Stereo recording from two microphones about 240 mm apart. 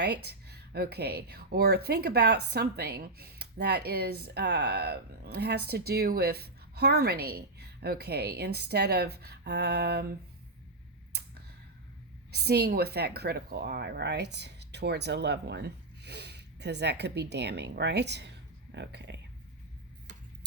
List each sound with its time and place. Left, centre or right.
0.0 s speech: right
12.3 s a woman's voice: right